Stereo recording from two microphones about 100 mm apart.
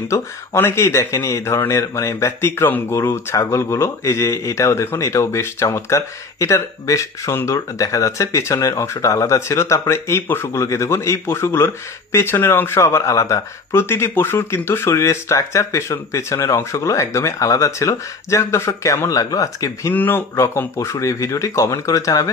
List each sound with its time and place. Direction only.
0.1 s speech: 25° left (ahead or behind)
19.9 s speech: 20° left (ahead or behind)
20.3 s speech: 30° left (ahead or behind)